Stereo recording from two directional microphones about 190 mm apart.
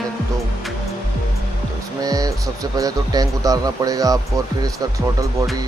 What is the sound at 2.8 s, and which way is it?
Speech, 20° right (ahead or behind).